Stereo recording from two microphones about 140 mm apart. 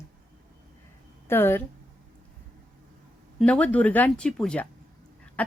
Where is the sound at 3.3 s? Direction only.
10° left (ahead or behind).